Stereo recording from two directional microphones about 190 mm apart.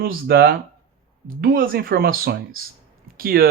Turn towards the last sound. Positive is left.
turn(degrees=-50)  # may be behind; listen again after turning